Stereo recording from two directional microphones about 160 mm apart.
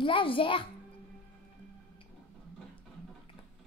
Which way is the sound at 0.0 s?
30° left (ahead or behind).